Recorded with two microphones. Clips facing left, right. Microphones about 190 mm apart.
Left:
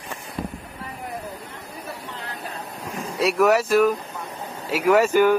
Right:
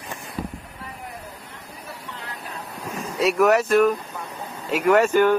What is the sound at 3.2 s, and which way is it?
Speech, centre (ahead or behind).